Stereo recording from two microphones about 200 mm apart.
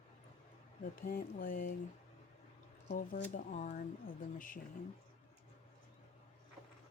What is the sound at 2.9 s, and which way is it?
Speech, 40° left (ahead or behind).